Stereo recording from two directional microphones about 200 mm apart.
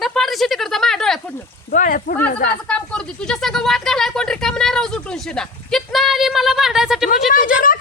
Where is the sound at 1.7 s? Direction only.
45° left (ahead or behind).